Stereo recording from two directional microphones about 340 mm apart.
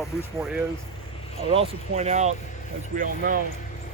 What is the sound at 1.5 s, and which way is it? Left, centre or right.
Speech, centre.